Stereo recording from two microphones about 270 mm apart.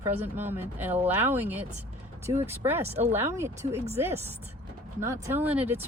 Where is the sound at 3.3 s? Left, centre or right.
Centre.